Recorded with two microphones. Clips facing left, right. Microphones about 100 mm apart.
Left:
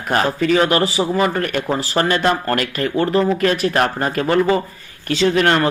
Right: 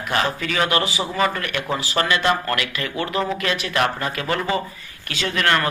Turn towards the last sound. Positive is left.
turn(degrees=30)  # may be behind; listen again after turning